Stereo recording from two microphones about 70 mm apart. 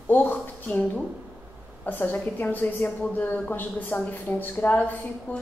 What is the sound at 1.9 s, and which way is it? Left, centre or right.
Speech, left.